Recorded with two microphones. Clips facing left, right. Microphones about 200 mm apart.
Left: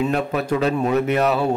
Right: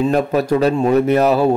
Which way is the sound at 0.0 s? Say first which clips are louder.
Right 5 dB; 40° right (ahead or behind).